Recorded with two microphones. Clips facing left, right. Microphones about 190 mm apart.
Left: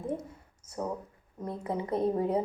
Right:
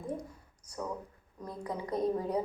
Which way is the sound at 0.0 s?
25° left (ahead or behind).